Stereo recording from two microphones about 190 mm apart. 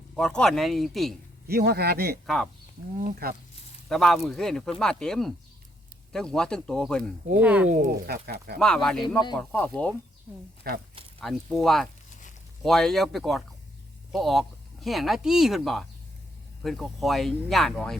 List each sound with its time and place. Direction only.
0.2 s speech: 5° left (ahead or behind)
1.5 s a man's voice: 55° right (ahead or behind)
2.2 s speech: centre (ahead or behind)
3.0 s speech: 45° right (ahead or behind)
3.8 s speech: centre (ahead or behind)
7.3 s speech: 5° right (ahead or behind)
7.7 s speech: 45° right (ahead or behind)
8.5 s speech: 5° left (ahead or behind)
11.2 s speech: centre (ahead or behind)